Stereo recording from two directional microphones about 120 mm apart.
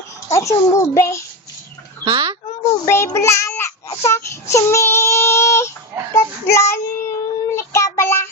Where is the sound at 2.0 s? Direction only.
45° right (ahead or behind).